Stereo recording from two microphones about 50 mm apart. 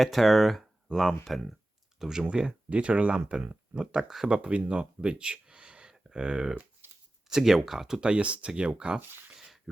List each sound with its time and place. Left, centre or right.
0.0 s speech: centre
2.3 s speech: right
3.9 s speech: centre
4.3 s speech: right
6.8 s shuffling cards: right
7.3 s speech: centre
8.1 s speech: right
9.3 s a sound: centre